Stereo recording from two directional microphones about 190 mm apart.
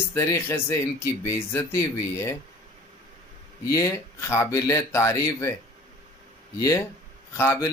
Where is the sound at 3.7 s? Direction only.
15° left (ahead or behind).